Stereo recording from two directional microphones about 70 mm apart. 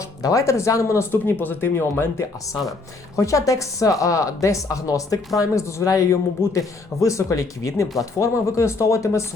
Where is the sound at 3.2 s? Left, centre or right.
Left.